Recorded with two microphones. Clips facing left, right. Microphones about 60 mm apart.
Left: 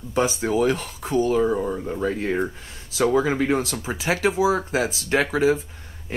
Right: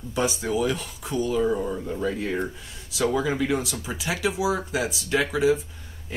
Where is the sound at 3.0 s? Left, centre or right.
Left.